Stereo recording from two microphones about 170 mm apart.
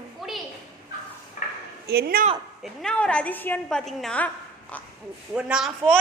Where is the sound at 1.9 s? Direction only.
65° right (ahead or behind).